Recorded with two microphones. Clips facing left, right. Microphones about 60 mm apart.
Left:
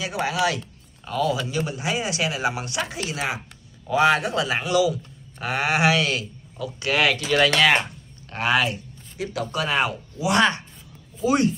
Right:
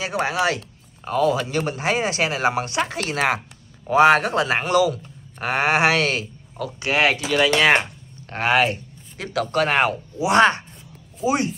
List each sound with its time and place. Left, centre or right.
0.0 s speech: right
3.0 s a woman's voice: right
3.8 s speech: right
7.2 s speech: centre
8.3 s a sound: right
9.2 s speech: right
10.1 s speech: right
11.2 s speech: right